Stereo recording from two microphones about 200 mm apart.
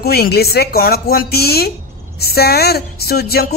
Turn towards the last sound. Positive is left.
turn(degrees=50)  # may be behind; listen again after turning